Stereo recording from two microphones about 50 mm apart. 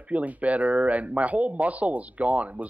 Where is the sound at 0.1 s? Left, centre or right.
Right.